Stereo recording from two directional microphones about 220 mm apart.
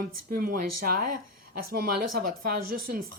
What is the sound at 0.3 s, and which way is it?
A woman's voice, 40° right (ahead or behind).